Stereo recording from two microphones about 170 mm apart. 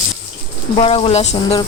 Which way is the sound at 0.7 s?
35° left (ahead or behind).